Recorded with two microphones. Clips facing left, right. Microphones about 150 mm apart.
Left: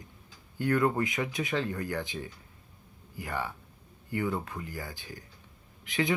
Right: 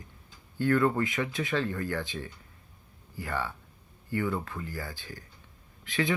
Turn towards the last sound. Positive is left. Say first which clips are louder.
# even
turn(degrees=20)  # may be behind; listen again after turning